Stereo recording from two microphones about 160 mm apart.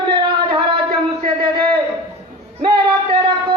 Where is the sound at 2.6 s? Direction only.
30° right (ahead or behind).